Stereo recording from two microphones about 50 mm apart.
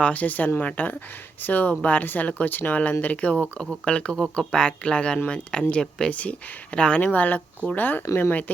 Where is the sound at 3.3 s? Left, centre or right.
Centre.